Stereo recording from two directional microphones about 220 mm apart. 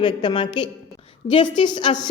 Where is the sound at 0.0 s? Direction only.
20° left (ahead or behind).